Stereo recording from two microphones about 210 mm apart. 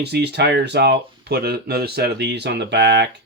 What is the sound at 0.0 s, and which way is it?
Speech, 50° right (ahead or behind).